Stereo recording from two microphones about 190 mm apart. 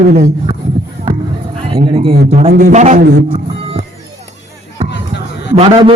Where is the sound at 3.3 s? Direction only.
30° right (ahead or behind).